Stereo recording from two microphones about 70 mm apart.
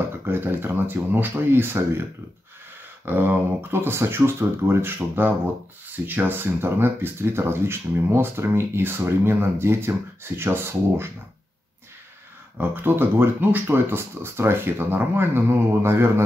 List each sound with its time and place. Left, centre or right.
0.2 s speech: right
3.1 s speech: right
12.5 s speech: right